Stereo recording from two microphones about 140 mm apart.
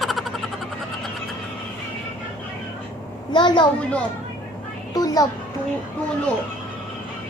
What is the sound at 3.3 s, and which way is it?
Speech, 30° left (ahead or behind).